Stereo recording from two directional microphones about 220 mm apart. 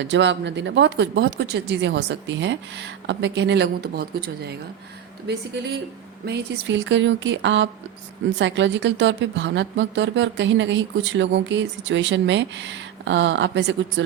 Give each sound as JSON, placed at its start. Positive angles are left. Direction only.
{"t": 0.0, "sound": "speech", "side_deg": -55}
{"t": 6.2, "sound": "a woman's voice", "side_deg": -50}